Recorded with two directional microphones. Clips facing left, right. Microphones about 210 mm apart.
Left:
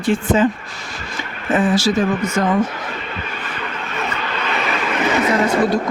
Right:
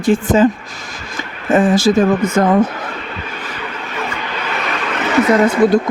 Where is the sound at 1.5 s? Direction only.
50° right (ahead or behind).